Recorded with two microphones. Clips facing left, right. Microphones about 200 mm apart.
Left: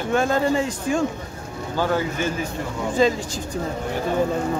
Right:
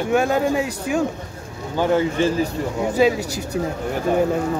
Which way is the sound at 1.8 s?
25° right (ahead or behind).